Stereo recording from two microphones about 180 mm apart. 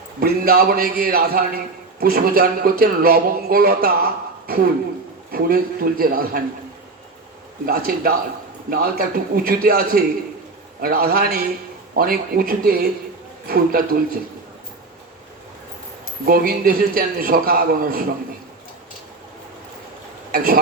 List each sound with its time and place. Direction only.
0.2 s a man's voice: 55° right (ahead or behind)
7.7 s a man's voice: 55° right (ahead or behind)
16.2 s a man's voice: 55° right (ahead or behind)
20.3 s speech: 55° right (ahead or behind)